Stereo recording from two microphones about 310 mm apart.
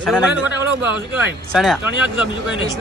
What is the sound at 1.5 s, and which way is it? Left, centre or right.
Speech, centre.